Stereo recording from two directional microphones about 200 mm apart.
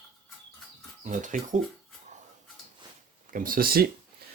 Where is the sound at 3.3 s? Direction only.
45° right (ahead or behind).